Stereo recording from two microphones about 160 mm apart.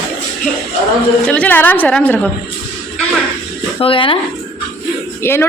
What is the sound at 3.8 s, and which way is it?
Speech, 35° left (ahead or behind).